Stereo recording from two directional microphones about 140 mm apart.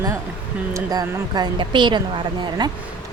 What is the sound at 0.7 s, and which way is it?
A woman's voice, 30° right (ahead or behind).